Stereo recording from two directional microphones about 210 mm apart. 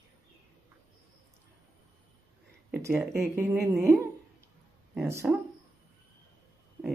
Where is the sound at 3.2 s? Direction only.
10° right (ahead or behind).